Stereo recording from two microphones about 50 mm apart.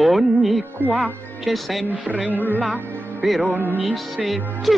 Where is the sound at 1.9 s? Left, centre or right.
Right.